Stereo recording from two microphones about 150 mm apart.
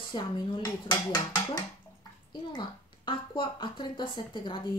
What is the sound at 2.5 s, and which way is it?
Speech, 30° left (ahead or behind).